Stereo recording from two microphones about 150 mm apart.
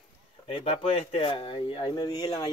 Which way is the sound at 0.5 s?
40° left (ahead or behind).